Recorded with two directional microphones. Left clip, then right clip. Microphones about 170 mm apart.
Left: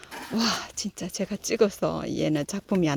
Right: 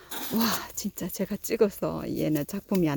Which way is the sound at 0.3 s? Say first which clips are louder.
Left 2 dB; 25° right (ahead or behind).